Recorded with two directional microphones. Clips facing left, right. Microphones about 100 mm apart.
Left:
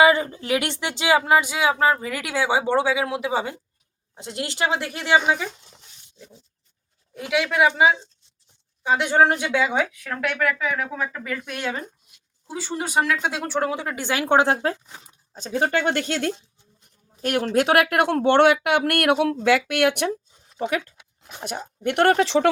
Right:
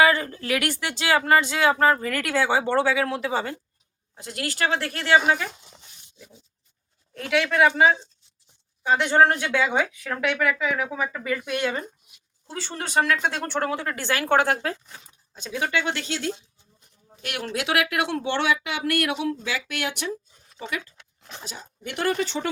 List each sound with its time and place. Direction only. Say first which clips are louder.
0.0 s speech: left 3 dB; 20° left (ahead or behind)
4.1 s speech: left 1 dB; 25° left (ahead or behind)
5.5 s dog: left 3 dB; 5° right (ahead or behind)
7.1 s speech: even; 10° left (ahead or behind)
12.5 s speech: left 4 dB; 10° left (ahead or behind); by 15.0 s 25° left (ahead or behind)
15.3 s a woman's voice: left 4 dB; 35° left (ahead or behind); by 20.9 s 55° left (ahead or behind)
21.0 s a sound: even; 10° left (ahead or behind)
21.4 s speech: left 12 dB; 60° left (ahead or behind); by 22.4 s 90° left